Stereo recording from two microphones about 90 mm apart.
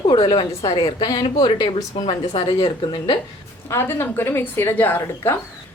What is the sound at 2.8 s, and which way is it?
Speech, 60° left (ahead or behind).